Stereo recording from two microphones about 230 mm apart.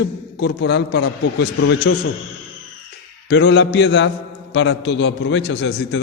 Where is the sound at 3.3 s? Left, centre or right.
Left.